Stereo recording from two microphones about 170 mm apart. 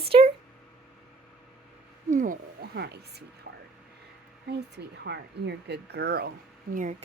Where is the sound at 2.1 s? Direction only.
50° right (ahead or behind).